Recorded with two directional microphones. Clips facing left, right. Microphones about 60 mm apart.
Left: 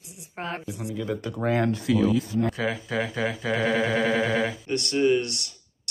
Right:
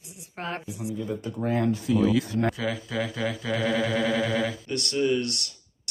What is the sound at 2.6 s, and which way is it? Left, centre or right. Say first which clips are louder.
Speech: left 2 dB; left.